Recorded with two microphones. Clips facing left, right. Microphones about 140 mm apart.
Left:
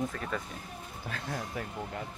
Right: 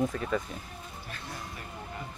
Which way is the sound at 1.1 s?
90° left.